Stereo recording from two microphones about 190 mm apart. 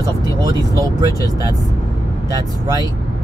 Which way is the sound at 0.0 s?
20° right (ahead or behind).